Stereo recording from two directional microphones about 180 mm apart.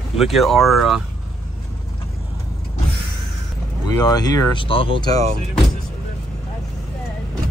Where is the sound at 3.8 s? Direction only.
20° left (ahead or behind).